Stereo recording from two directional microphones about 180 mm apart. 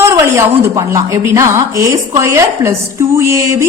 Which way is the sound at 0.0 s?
15° right (ahead or behind).